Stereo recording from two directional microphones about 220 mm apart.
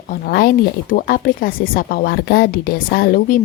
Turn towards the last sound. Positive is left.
turn(degrees=40)  # may be behind; listen again after turning